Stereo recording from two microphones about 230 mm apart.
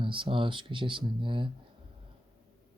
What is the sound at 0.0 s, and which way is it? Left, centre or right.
Speech, right.